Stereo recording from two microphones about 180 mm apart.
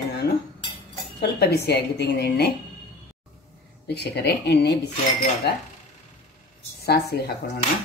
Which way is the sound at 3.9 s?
65° left (ahead or behind).